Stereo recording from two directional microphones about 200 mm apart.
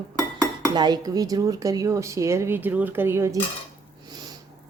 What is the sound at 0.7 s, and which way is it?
Speech, 20° right (ahead or behind).